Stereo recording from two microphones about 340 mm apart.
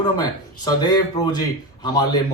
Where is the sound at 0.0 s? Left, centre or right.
Centre.